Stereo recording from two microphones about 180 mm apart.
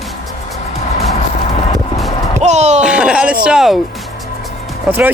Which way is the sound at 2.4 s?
40° right (ahead or behind).